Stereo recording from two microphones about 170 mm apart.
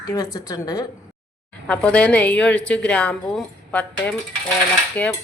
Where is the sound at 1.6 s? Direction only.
5° left (ahead or behind).